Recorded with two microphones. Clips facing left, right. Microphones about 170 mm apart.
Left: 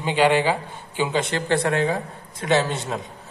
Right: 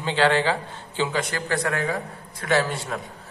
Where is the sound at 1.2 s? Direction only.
25° left (ahead or behind).